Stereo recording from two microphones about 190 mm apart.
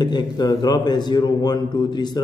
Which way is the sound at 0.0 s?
20° left (ahead or behind).